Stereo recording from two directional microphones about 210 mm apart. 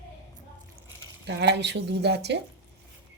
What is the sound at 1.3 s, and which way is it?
Speech, 55° right (ahead or behind).